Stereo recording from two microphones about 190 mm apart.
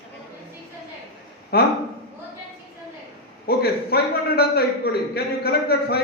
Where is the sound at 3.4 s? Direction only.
55° left (ahead or behind).